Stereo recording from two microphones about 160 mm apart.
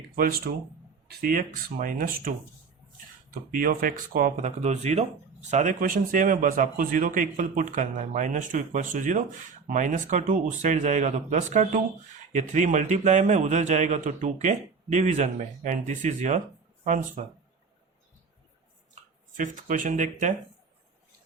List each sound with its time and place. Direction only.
0.5 s speech: 80° right
1.2 s speech: 60° right (ahead or behind)
3.5 s speech: 60° right (ahead or behind)
19.4 s speech: 55° right (ahead or behind)